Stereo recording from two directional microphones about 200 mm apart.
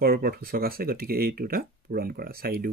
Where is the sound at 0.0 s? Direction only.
50° right (ahead or behind).